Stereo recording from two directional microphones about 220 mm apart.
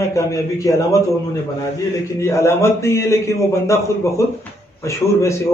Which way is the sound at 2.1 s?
10° left (ahead or behind).